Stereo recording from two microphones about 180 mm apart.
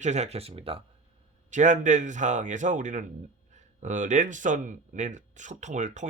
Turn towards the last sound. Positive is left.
turn(degrees=-40)  # may be behind; listen again after turning